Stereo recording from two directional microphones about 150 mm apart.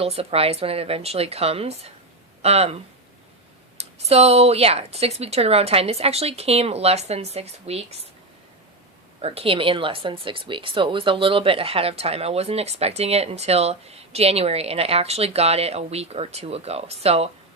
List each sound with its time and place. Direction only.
0.0 s a woman's voice: 40° right (ahead or behind)
9.2 s speech: 40° right (ahead or behind)